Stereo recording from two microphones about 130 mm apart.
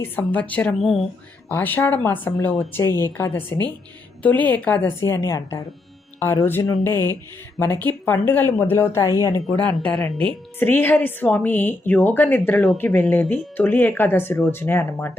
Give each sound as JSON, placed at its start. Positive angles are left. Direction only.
{"t": 0.0, "sound": "a woman's voice", "side_deg": 10}
{"t": 1.5, "sound": "a woman's voice", "side_deg": 15}
{"t": 9.7, "sound": "a woman's voice", "side_deg": 5}